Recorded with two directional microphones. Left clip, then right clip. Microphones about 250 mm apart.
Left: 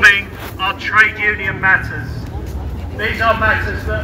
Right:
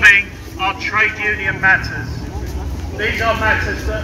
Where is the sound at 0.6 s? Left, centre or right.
Left.